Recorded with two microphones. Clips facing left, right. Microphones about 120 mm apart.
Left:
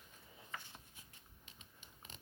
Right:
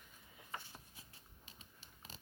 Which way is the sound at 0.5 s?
35° right (ahead or behind).